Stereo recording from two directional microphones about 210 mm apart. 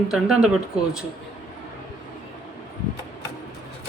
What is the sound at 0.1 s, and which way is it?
Speech, 5° right (ahead or behind).